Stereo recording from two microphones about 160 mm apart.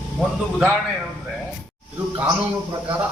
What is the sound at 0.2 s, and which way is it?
Speech, 5° right (ahead or behind).